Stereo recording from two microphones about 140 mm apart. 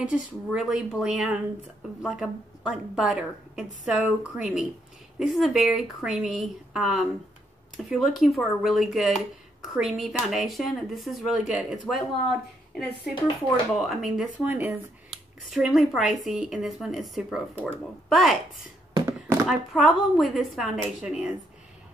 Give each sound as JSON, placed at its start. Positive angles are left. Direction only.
{"t": 0.0, "sound": "a woman's voice", "side_deg": -5}
{"t": 15.0, "sound": "speech", "side_deg": 0}
{"t": 19.4, "sound": "speech", "side_deg": 0}